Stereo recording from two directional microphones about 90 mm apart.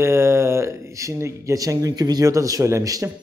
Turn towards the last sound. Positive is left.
turn(degrees=-35)  # may be behind; listen again after turning